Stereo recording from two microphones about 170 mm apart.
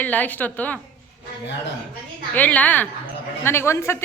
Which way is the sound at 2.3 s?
10° left (ahead or behind).